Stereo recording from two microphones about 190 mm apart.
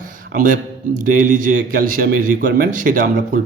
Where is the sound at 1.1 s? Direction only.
45° right (ahead or behind).